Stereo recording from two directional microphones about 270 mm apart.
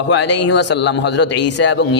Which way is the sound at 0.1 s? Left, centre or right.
Left.